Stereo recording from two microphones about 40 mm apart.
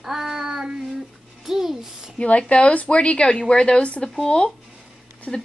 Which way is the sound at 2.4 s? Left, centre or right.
Left.